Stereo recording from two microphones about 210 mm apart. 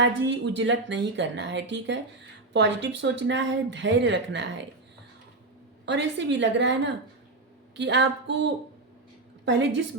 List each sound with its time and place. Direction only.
0.0 s speech: 60° right (ahead or behind)
5.8 s speech: 55° right (ahead or behind)
7.8 s speech: 55° right (ahead or behind)